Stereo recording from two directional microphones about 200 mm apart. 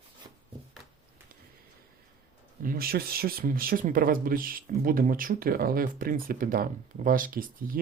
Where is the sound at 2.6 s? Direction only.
45° right (ahead or behind).